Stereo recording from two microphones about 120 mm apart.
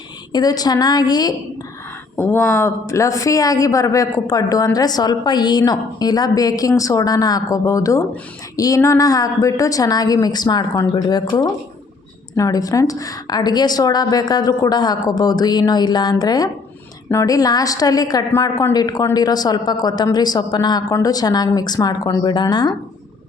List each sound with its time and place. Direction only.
0.3 s a woman's voice: 35° left (ahead or behind)
2.1 s a man's voice: 20° left (ahead or behind); by 22.7 s 40° left (ahead or behind)